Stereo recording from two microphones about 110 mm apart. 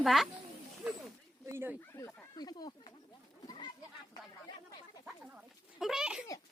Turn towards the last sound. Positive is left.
turn(degrees=-5)  # may be behind; listen again after turning